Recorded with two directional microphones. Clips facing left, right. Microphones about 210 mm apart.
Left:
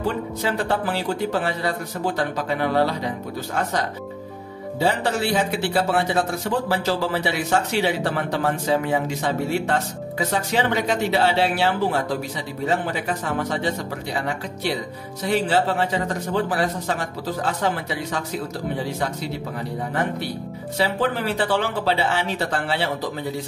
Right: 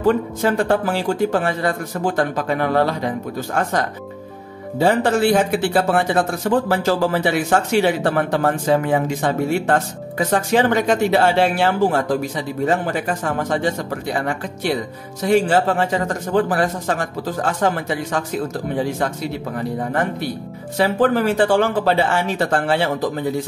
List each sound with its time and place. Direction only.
0.0 s speech: 50° right (ahead or behind)
4.7 s speech: 50° right (ahead or behind)
20.7 s speech: 50° right (ahead or behind)